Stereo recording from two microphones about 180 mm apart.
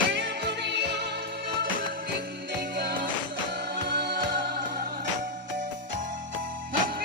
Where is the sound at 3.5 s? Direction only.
75° right (ahead or behind).